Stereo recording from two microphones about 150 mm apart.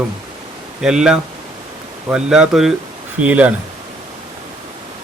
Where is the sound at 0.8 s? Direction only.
5° right (ahead or behind).